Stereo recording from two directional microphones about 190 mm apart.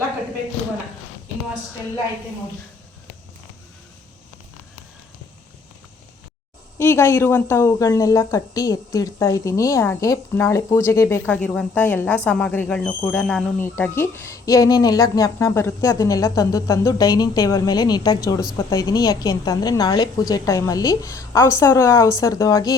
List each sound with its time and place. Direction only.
6.7 s a woman's voice: 10° left (ahead or behind)